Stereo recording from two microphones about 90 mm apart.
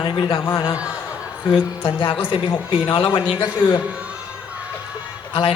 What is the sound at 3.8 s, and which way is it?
Speech, 15° right (ahead or behind).